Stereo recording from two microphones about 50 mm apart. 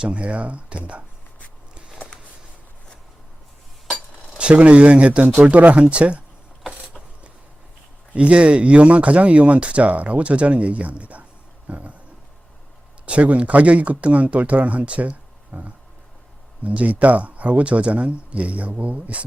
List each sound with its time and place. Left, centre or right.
0.0 s speech: right
4.4 s speech: right
5.7 s speech: right
8.1 s speech: right
11.7 s a sound: right
13.1 s speech: right